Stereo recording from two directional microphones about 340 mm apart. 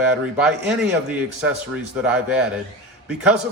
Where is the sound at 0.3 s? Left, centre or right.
Centre.